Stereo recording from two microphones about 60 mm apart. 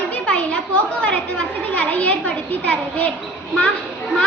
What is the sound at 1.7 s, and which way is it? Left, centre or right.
A child's voice, left.